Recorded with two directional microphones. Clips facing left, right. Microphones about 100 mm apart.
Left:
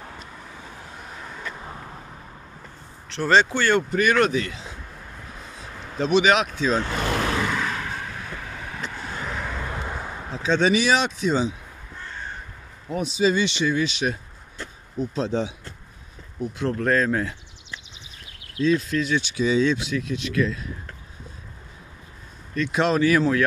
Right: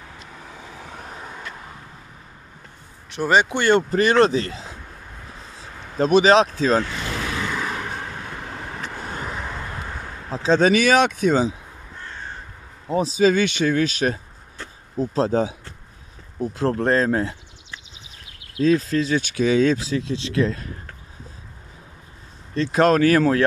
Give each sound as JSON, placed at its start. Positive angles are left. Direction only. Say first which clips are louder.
{"t": 3.1, "sound": "speech", "louder": "even", "side_deg": -15}
{"t": 5.6, "sound": "speech", "louder": "right 5 dB", "side_deg": -40}
{"t": 7.7, "sound": "vehicle", "louder": "right 1 dB", "side_deg": -20}
{"t": 8.0, "sound": "vehicle", "louder": "right 2 dB", "side_deg": -40}
{"t": 9.4, "sound": "vehicle", "louder": "even", "side_deg": -5}
{"t": 10.3, "sound": "speech", "louder": "right 4 dB", "side_deg": -35}
{"t": 10.7, "sound": "speech", "louder": "right 4 dB", "side_deg": -55}
{"t": 12.8, "sound": "speech", "louder": "right 6 dB", "side_deg": -30}
{"t": 13.2, "sound": "speech", "louder": "right 3 dB", "side_deg": -50}
{"t": 18.6, "sound": "speech", "louder": "right 3 dB", "side_deg": -40}
{"t": 19.8, "sound": "speech", "louder": "right 2 dB", "side_deg": -30}
{"t": 22.5, "sound": "speech", "louder": "right 5 dB", "side_deg": -35}